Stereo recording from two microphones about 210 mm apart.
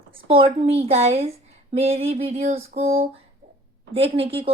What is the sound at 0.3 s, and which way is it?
Speech, 25° right (ahead or behind).